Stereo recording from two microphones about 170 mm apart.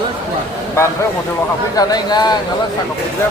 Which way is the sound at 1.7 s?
25° left (ahead or behind).